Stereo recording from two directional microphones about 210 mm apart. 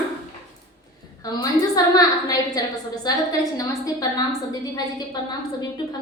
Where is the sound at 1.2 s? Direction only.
15° left (ahead or behind).